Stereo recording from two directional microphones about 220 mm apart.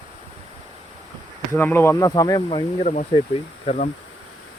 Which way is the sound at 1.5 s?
10° left (ahead or behind).